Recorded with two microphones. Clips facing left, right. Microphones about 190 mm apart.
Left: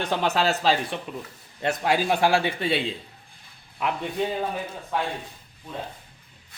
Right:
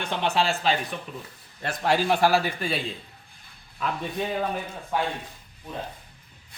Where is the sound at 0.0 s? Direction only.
40° left (ahead or behind).